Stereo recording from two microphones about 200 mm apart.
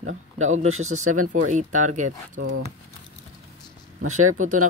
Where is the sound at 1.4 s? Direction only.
40° right (ahead or behind).